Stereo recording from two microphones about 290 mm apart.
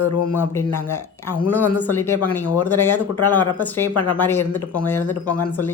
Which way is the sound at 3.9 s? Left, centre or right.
Left.